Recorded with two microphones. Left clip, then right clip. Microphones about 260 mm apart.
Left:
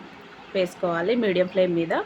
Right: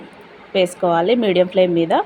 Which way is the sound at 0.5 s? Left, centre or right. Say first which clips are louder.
Right 8 dB; centre.